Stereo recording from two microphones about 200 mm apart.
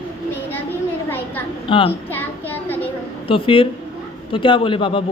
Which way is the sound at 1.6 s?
25° left (ahead or behind).